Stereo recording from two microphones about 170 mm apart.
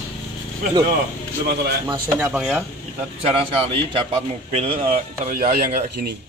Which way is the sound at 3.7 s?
30° right (ahead or behind).